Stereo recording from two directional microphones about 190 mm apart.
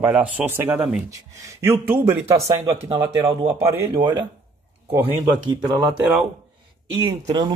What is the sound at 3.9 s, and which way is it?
Speech, 25° right (ahead or behind).